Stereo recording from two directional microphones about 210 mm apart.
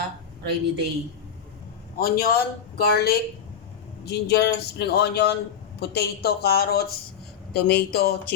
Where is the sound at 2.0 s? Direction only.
45° left (ahead or behind).